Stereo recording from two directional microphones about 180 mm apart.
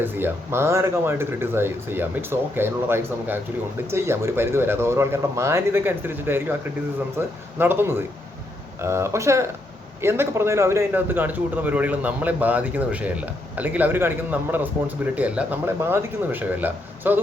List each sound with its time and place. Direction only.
0.0 s a man's voice: 10° right (ahead or behind)